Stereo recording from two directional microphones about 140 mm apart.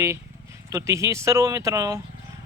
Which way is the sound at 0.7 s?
20° right (ahead or behind).